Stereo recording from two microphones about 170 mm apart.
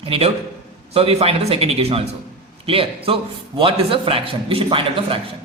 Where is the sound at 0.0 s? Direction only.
35° right (ahead or behind).